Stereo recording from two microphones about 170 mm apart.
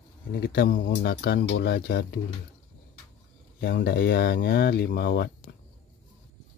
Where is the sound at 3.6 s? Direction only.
65° left (ahead or behind).